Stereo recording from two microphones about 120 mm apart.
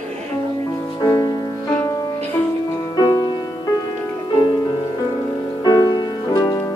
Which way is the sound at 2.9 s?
30° left (ahead or behind).